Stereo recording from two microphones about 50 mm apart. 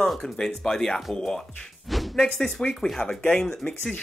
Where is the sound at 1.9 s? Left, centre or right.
Centre.